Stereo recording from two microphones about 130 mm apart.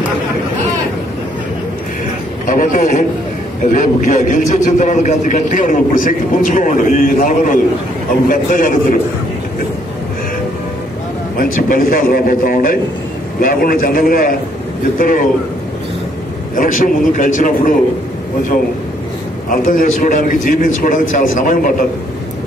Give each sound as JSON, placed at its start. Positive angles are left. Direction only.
{"t": 2.4, "sound": "a sound", "side_deg": 90}
{"t": 3.7, "sound": "a man's voice", "side_deg": 85}
{"t": 11.3, "sound": "a man's voice", "side_deg": 90}
{"t": 16.5, "sound": "a man's voice", "side_deg": 90}
{"t": 19.5, "sound": "a man's voice", "side_deg": 90}